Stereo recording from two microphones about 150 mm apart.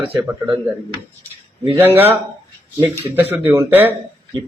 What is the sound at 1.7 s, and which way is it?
A man's voice, 15° right (ahead or behind).